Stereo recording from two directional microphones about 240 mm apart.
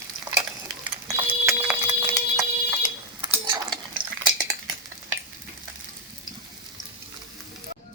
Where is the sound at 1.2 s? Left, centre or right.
Centre.